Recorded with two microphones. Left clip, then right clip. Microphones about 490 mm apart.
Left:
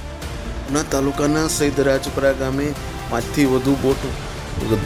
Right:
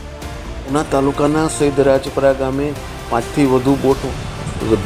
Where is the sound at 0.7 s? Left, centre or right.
Left.